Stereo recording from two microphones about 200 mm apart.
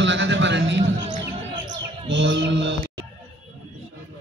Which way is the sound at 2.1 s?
65° right (ahead or behind).